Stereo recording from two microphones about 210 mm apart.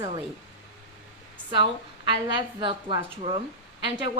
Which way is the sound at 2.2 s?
25° right (ahead or behind).